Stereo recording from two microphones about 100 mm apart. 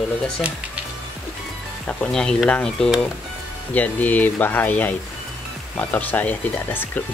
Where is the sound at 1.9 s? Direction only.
10° left (ahead or behind).